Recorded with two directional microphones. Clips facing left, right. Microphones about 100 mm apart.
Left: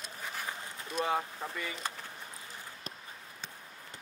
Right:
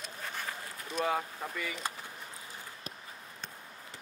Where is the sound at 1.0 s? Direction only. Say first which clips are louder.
Even; 25° left (ahead or behind).